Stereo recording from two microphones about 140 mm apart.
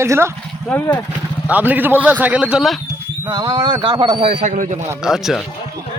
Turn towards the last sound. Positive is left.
turn(degrees=-5)  # may be behind; listen again after turning